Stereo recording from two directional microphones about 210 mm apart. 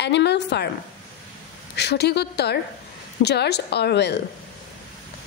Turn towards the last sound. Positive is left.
turn(degrees=55)  # may be behind; listen again after turning